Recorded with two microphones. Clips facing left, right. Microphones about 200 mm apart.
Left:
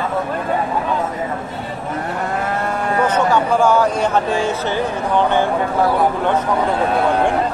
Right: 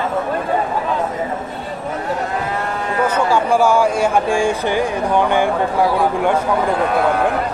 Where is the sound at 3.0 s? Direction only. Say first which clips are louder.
Right 1 dB; 10° right (ahead or behind).